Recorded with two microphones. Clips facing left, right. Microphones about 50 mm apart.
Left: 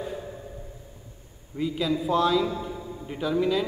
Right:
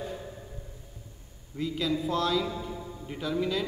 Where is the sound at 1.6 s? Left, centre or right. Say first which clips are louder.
Left 3 dB; centre.